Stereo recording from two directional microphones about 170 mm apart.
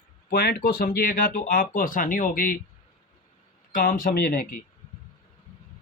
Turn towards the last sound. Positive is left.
turn(degrees=55)  # may be behind; listen again after turning